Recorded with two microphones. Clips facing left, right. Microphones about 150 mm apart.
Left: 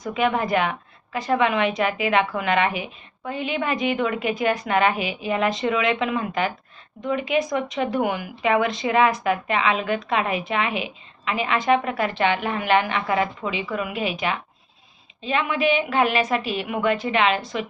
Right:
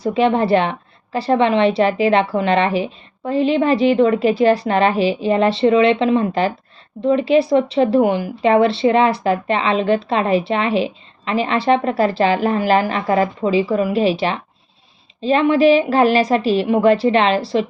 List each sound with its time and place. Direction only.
0.0 s speech: 30° right (ahead or behind)